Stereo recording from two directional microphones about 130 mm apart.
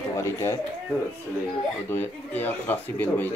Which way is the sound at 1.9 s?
15° left (ahead or behind).